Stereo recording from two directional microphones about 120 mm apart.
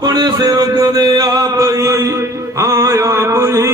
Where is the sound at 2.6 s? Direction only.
25° right (ahead or behind).